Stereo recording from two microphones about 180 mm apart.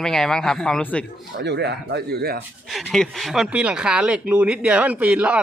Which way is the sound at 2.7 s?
Centre (ahead or behind).